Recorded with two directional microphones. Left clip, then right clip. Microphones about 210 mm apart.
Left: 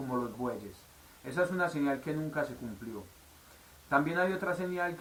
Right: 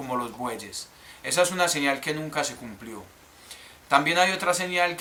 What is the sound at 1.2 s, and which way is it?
A man's voice, 30° right (ahead or behind).